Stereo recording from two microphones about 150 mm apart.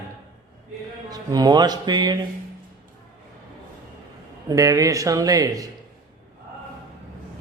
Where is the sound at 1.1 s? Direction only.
25° right (ahead or behind).